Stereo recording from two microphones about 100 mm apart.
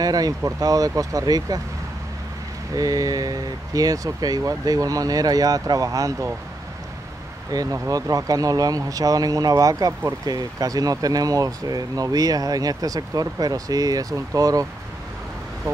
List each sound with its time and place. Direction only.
0.0 s speech: 40° right (ahead or behind)
2.7 s speech: 35° right (ahead or behind)
7.5 s speech: 35° right (ahead or behind)